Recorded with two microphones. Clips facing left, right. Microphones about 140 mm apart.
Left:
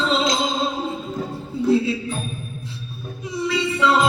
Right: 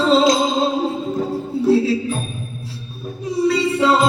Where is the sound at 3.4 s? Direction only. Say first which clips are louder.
Right 4 dB; 40° right (ahead or behind).